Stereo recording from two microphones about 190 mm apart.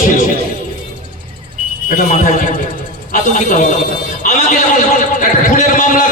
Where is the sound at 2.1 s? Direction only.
45° left (ahead or behind).